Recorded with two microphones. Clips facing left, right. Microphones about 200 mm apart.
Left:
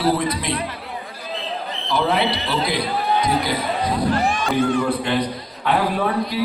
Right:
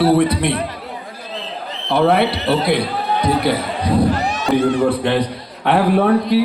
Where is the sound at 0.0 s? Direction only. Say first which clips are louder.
Right 6 dB; 65° right (ahead or behind).